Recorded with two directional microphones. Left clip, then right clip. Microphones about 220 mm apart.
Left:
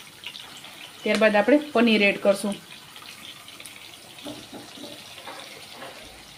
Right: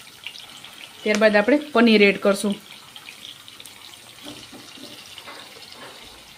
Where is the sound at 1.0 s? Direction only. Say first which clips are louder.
Right 2 dB; 10° right (ahead or behind).